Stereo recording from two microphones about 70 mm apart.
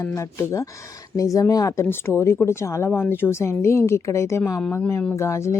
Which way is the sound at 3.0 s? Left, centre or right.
Left.